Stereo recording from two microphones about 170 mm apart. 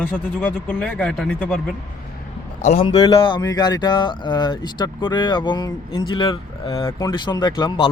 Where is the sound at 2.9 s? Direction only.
30° left (ahead or behind).